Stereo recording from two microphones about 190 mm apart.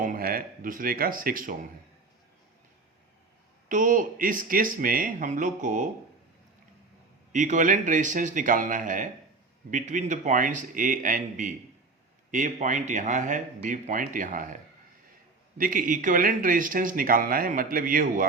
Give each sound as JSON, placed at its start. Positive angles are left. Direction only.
{"t": 0.0, "sound": "speech", "side_deg": -50}
{"t": 3.7, "sound": "speech", "side_deg": -45}
{"t": 7.3, "sound": "speech", "side_deg": -40}